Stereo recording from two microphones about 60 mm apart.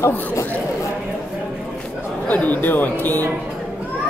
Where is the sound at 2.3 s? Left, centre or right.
Left.